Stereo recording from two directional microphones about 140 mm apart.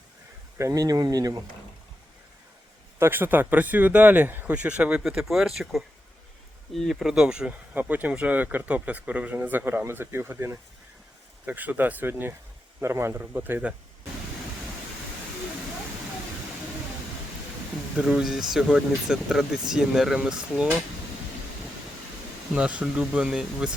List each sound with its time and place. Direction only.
0.6 s speech: 25° right (ahead or behind)
3.0 s speech: 15° right (ahead or behind)
17.9 s speech: 5° right (ahead or behind)
22.5 s speech: 10° right (ahead or behind)